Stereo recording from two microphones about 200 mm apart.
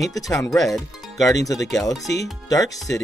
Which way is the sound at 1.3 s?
15° left (ahead or behind).